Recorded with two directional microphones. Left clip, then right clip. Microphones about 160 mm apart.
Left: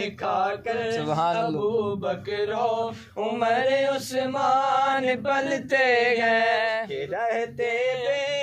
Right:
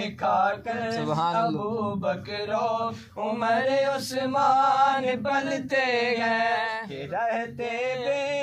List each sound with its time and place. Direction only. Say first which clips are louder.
0.2 s male singing: right 3 dB; 25° left (ahead or behind)
0.8 s a sound: left 1 dB; 40° left (ahead or behind)
1.6 s mantra: left 4 dB; 30° left (ahead or behind)
7.2 s male singing: left 1 dB; 25° left (ahead or behind)